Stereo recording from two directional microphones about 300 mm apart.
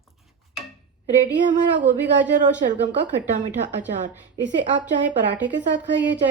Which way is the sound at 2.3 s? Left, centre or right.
Right.